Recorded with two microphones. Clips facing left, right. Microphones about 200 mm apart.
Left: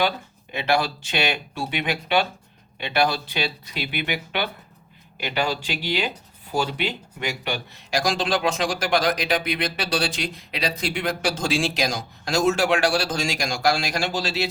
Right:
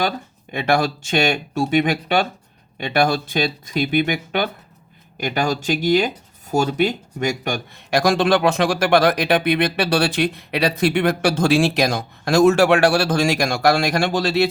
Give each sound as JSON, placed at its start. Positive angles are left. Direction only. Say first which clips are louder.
{"t": 0.5, "sound": "speech", "louder": "right 4 dB", "side_deg": -50}